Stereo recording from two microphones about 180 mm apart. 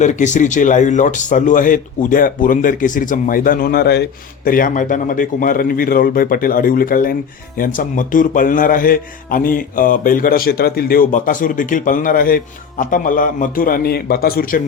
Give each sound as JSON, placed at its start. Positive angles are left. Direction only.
{"t": 0.0, "sound": "a man's voice", "side_deg": 40}
{"t": 4.4, "sound": "a man's voice", "side_deg": 50}